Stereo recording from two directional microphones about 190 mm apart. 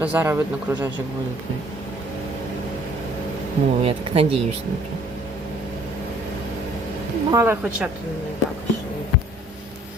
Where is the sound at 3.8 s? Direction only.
30° right (ahead or behind).